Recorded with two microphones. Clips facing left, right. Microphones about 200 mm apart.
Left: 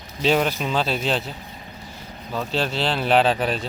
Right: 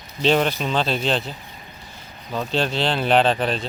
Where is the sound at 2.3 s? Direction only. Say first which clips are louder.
Right 2 dB; 5° left (ahead or behind).